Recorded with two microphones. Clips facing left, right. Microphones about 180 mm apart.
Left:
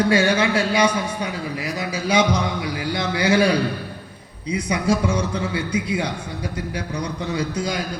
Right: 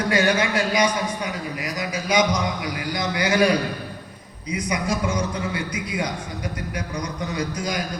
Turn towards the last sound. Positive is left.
turn(degrees=25)  # may be behind; listen again after turning